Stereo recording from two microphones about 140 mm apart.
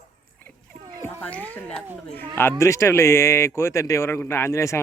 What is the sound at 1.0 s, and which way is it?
Speech, 10° left (ahead or behind).